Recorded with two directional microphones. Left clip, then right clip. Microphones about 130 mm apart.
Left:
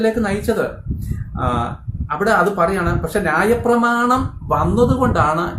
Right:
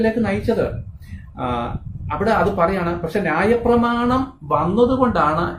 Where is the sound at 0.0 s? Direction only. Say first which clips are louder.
Left 1 dB; 15° left (ahead or behind).